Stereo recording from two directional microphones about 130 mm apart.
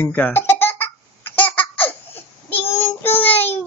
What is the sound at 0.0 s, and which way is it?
Baby laughter, 10° left (ahead or behind).